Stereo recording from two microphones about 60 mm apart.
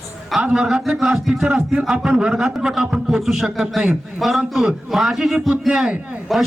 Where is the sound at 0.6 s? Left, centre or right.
Centre.